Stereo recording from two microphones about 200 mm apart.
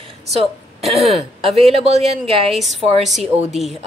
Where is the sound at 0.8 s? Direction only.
Centre (ahead or behind).